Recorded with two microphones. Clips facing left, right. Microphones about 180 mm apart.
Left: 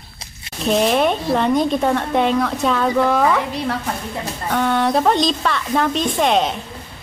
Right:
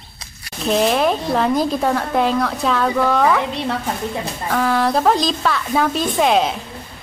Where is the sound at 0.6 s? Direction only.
Centre (ahead or behind).